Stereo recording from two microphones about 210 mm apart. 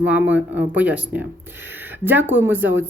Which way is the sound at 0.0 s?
5° right (ahead or behind).